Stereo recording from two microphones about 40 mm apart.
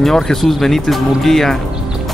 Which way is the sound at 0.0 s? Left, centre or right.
Centre.